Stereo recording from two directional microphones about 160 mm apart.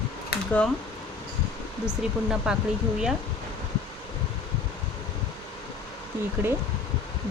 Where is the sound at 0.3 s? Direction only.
80° left.